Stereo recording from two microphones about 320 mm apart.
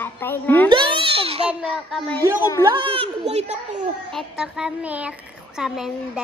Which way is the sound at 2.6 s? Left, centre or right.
Centre.